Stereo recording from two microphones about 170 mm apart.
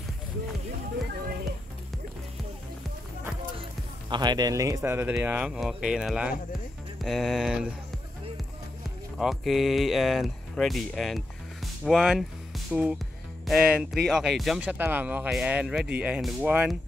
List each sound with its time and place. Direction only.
4.1 s speech: 25° right (ahead or behind); by 6.3 s 5° right (ahead or behind)
7.0 s music: centre (ahead or behind)
9.2 s speech: centre (ahead or behind)
13.5 s music: 5° right (ahead or behind)
14.0 s speech: 5° right (ahead or behind)